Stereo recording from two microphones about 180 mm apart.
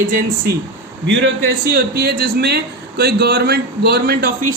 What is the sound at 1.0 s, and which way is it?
Speech, 80° right.